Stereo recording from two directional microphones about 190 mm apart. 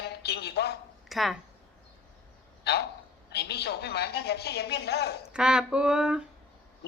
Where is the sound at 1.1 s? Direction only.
Centre (ahead or behind).